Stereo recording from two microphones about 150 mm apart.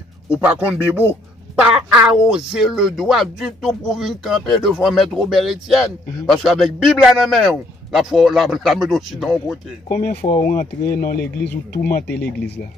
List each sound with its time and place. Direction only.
0.3 s a man's voice: 10° right (ahead or behind)
9.8 s speech: 65° left (ahead or behind)
11.7 s speech: 80° left